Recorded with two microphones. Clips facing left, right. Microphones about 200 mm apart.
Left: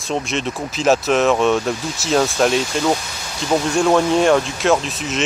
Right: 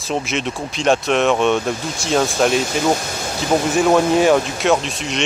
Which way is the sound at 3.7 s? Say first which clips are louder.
Right 1 dB; 5° right (ahead or behind).